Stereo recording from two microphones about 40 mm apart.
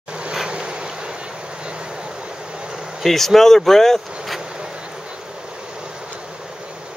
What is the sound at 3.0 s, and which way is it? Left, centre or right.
Speech, centre.